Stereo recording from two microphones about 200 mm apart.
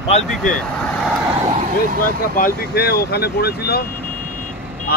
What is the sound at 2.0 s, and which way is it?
Speech, 45° left (ahead or behind).